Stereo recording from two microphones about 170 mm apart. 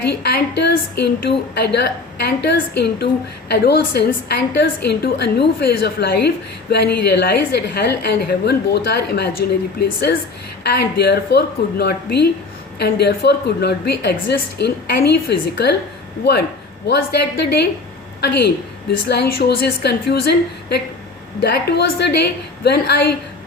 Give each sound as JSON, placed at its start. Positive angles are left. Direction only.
{"t": 0.2, "sound": "a woman's voice", "side_deg": 70}
{"t": 10.6, "sound": "a woman's voice", "side_deg": 75}
{"t": 16.8, "sound": "a woman's voice", "side_deg": 75}